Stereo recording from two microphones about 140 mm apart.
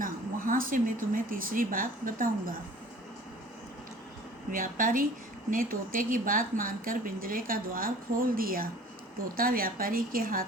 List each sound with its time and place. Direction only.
0.0 s speech: 80° right
4.5 s a woman's voice: 80° right
5.5 s a woman's voice: 85° right